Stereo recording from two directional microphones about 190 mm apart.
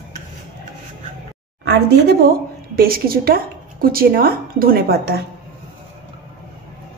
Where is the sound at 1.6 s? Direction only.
60° right (ahead or behind).